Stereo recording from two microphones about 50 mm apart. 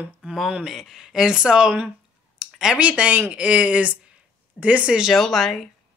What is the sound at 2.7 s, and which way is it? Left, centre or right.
Speech, right.